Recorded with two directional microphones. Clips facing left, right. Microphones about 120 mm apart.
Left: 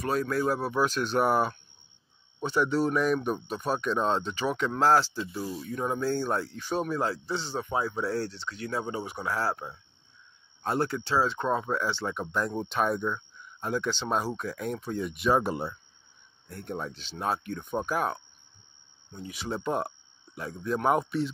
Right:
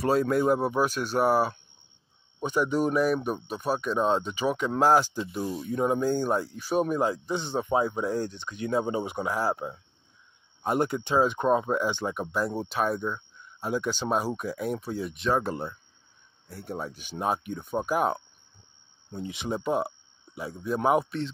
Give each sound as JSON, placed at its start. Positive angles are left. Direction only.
{"t": 0.0, "sound": "speech", "side_deg": -25}
{"t": 16.4, "sound": "speech", "side_deg": -5}
{"t": 19.0, "sound": "speech", "side_deg": -30}
{"t": 19.6, "sound": "speech", "side_deg": -10}